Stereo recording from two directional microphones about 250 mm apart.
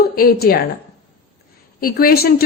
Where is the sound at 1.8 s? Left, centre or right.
Left.